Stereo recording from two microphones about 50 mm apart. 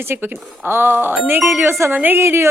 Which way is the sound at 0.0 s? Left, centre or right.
Right.